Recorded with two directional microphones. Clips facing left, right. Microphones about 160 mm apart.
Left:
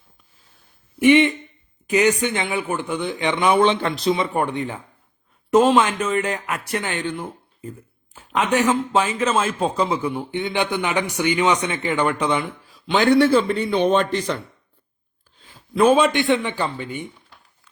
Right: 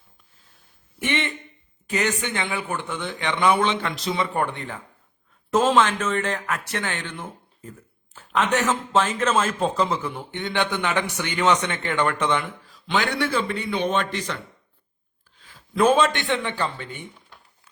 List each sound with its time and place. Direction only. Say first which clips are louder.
0.9 s a man's voice: left 12 dB; 10° left (ahead or behind)
3.6 s speech: left 6 dB; 30° left (ahead or behind)
4.1 s a man's voice: left 2 dB; 20° left (ahead or behind)
8.1 s a man's voice: left 2 dB; 15° left (ahead or behind)
13.1 s speech: left 9 dB; 35° left (ahead or behind)
15.7 s a man's voice: left 3 dB; 10° left (ahead or behind)